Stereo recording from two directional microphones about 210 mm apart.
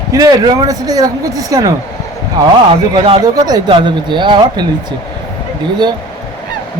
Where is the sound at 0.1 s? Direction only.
15° right (ahead or behind).